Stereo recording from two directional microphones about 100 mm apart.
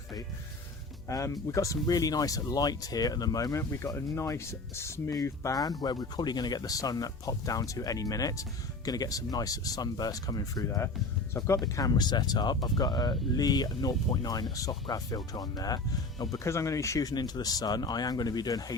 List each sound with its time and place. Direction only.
1.0 s speech: 35° left (ahead or behind)
16.4 s speech: 30° left (ahead or behind)